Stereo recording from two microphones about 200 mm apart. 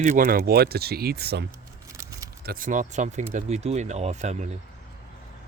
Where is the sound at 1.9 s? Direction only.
15° right (ahead or behind).